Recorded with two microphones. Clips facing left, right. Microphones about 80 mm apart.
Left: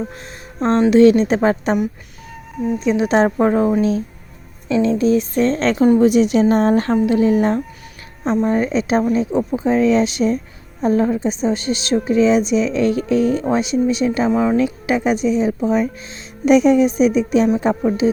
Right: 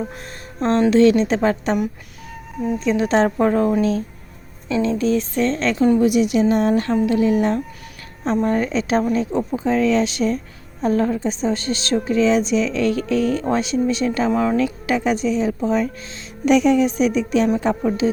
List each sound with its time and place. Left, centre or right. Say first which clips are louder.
0.0 s a woman's voice: left 1 dB; centre; by 1.7 s left
2.6 s speech: left 2 dB; centre
2.8 s a woman's voice: left 2 dB; centre; by 6.9 s left
7.0 s a woman's voice: left 2 dB; left
8.2 s speech: left 2 dB; centre
8.4 s speech: left 2 dB; centre
9.3 s speech: left 3 dB; centre
9.6 s a woman's voice: left 3 dB; centre
14.5 s a woman's voice: left 2 dB; left